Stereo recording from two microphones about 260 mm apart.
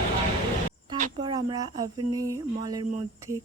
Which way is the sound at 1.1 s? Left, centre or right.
Centre.